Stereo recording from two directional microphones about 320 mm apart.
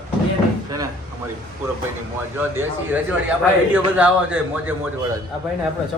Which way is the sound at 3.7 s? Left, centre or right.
Centre.